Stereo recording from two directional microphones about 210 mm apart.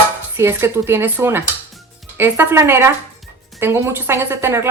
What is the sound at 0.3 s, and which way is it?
Speech, 10° right (ahead or behind).